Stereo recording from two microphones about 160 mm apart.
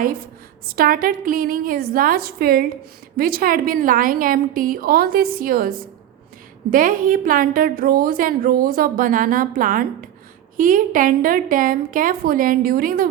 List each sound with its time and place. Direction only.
0.7 s a woman's voice: 65° right (ahead or behind)